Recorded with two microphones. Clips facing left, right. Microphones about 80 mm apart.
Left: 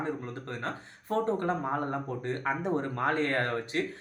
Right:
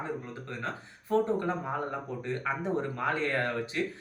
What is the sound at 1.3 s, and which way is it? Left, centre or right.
Speech, left.